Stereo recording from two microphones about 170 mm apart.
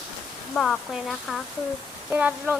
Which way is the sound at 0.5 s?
Centre (ahead or behind).